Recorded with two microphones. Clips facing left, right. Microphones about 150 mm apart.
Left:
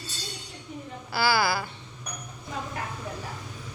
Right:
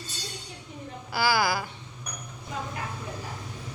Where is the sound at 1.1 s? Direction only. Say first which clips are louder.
Even; 15° right (ahead or behind).